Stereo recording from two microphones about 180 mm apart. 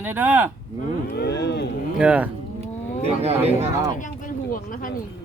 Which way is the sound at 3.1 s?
35° right (ahead or behind).